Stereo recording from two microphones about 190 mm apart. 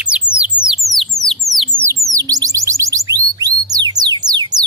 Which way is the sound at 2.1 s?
20° right (ahead or behind).